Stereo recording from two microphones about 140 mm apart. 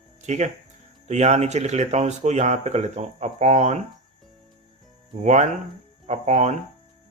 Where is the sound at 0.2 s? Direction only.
55° right (ahead or behind).